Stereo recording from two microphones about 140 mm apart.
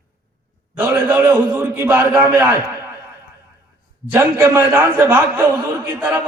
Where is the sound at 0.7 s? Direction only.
15° right (ahead or behind).